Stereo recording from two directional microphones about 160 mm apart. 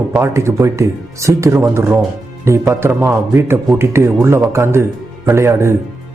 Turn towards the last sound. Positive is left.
turn(degrees=-15)  # may be behind; listen again after turning